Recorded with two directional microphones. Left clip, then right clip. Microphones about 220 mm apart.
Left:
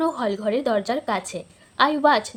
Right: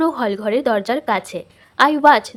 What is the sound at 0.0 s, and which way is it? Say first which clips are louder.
A woman's voice: right 4 dB; 25° right (ahead or behind).